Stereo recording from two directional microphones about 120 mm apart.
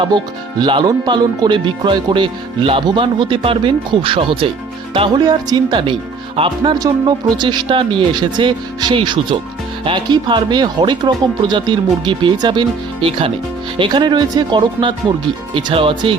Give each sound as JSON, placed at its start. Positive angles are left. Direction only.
{"t": 0.6, "sound": "speech", "side_deg": -40}
{"t": 6.7, "sound": "speech", "side_deg": -35}